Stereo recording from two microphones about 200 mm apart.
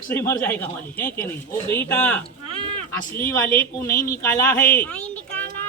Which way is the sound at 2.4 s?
30° right (ahead or behind).